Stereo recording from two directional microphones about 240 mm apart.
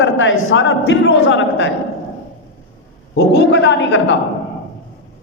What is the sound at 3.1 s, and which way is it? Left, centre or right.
A man's voice, left.